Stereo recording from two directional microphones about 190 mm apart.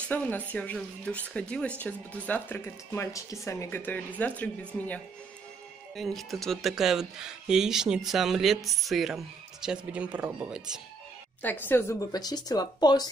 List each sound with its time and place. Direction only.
0.1 s speech: 10° left (ahead or behind)
11.4 s speech: 10° left (ahead or behind)